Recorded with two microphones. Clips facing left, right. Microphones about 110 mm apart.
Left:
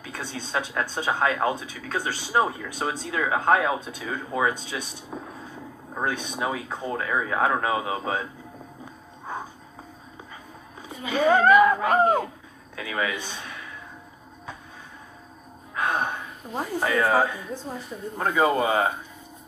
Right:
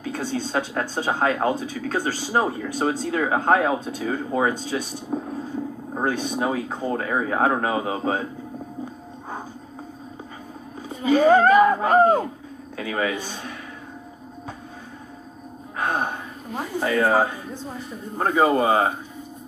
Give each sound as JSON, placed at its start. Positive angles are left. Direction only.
{"t": 0.0, "sound": "speech", "side_deg": -40}
{"t": 10.8, "sound": "speech", "side_deg": -35}
{"t": 15.7, "sound": "speech", "side_deg": -40}